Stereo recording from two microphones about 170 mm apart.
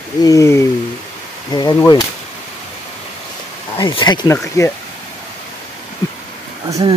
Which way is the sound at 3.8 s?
25° left (ahead or behind).